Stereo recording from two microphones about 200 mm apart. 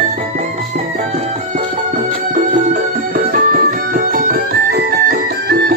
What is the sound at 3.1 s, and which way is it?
Music, 45° right (ahead or behind).